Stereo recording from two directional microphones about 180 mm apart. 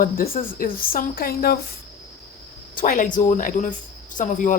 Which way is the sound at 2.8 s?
50° left (ahead or behind).